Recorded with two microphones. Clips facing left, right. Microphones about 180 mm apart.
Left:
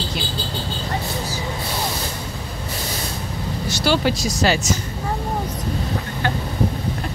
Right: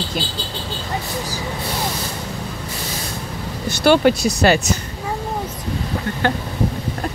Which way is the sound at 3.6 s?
55° right (ahead or behind).